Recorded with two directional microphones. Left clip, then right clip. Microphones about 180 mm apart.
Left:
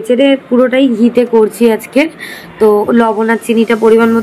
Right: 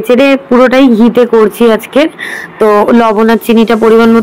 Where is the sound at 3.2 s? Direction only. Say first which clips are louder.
Right 4 dB; 35° right (ahead or behind).